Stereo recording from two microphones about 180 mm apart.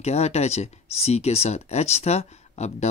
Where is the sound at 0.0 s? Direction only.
35° left (ahead or behind).